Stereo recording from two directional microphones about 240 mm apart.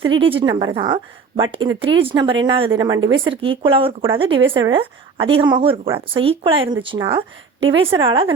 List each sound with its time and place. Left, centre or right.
0.2 s speech: right